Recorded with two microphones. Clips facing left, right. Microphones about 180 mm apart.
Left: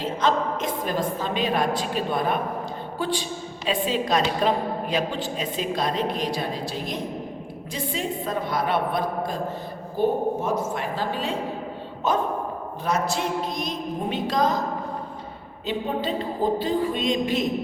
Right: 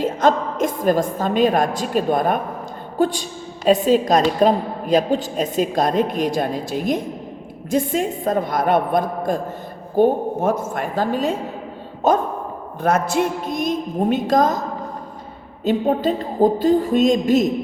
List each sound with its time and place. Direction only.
0.0 s a woman's voice: 45° right (ahead or behind)
15.6 s a woman's voice: 45° right (ahead or behind)